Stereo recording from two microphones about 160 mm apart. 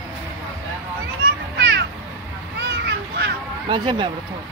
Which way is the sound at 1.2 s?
90° right.